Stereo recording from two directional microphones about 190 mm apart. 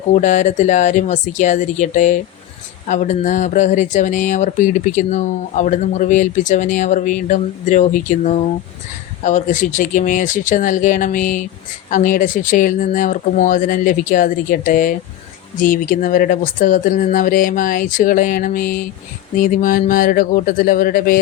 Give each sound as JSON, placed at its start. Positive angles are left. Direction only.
{"t": 0.1, "sound": "speech", "side_deg": 40}